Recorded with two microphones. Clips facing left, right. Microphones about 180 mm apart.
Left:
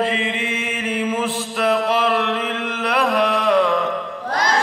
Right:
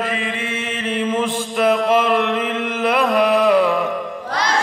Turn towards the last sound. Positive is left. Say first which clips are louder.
# right 3 dB
turn(degrees=-5)  # may be behind; listen again after turning